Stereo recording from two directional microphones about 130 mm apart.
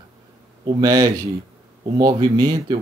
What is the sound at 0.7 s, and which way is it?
Speech, 30° right (ahead or behind).